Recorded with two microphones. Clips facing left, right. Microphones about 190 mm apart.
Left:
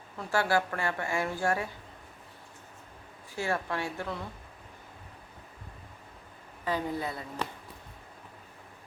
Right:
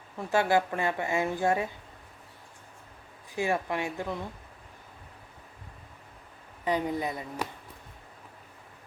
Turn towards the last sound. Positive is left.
turn(degrees=-15)  # may be behind; listen again after turning